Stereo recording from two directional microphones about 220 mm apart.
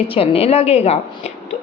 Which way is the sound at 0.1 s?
25° left (ahead or behind).